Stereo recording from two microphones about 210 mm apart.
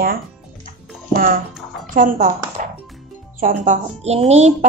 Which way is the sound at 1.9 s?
40° right (ahead or behind).